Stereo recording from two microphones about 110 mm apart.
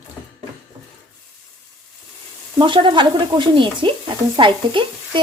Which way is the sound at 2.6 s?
45° right (ahead or behind).